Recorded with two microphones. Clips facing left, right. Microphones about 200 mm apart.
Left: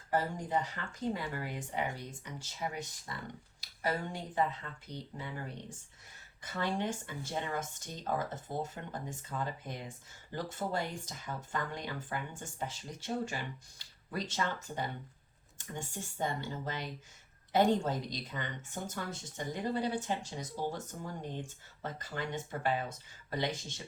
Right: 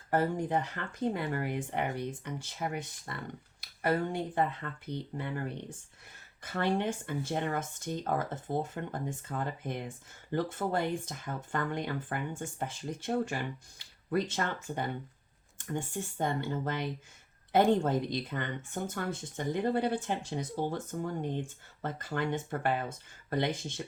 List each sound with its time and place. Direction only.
0.1 s speech: 55° right (ahead or behind)